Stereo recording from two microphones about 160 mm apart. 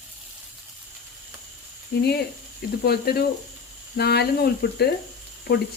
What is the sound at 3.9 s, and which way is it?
Speech, 90° left.